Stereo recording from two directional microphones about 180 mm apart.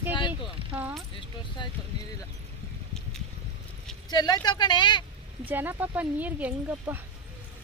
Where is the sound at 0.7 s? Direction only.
10° right (ahead or behind).